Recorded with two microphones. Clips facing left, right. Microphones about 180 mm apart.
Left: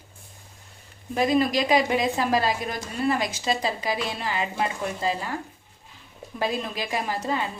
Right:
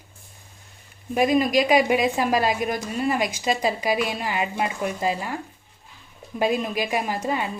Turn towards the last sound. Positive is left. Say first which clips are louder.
# right 2 dB
turn(degrees=-15)  # may be behind; listen again after turning